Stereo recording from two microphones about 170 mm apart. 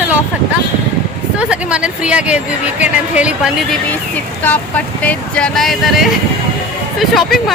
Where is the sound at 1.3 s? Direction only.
5° right (ahead or behind).